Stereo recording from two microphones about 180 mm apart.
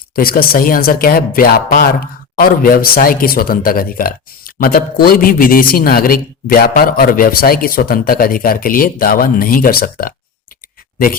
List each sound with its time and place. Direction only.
0.2 s speech: 55° left (ahead or behind)